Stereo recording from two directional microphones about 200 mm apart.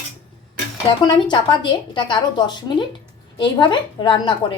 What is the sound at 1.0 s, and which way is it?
A woman's voice, 20° left (ahead or behind).